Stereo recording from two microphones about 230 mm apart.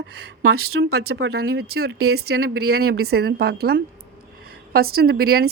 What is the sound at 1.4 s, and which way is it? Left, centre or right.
A woman's voice, right.